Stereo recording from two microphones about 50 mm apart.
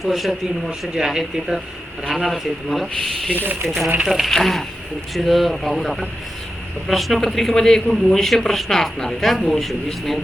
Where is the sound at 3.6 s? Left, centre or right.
Centre.